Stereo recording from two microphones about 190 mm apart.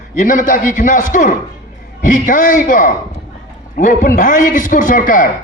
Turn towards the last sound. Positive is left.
turn(degrees=45)  # may be behind; listen again after turning